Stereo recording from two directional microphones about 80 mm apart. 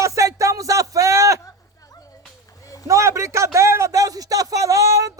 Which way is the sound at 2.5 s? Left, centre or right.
Left.